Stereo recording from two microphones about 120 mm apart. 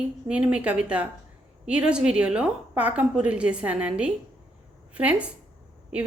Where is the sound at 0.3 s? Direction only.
10° right (ahead or behind).